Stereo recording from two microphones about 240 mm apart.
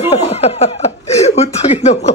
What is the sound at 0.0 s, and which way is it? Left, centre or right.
Chuckle, left.